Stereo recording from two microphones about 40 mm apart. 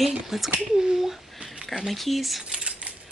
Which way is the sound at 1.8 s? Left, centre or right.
Centre.